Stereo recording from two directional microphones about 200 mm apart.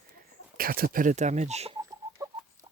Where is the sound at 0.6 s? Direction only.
45° right (ahead or behind); by 1.8 s 30° right (ahead or behind).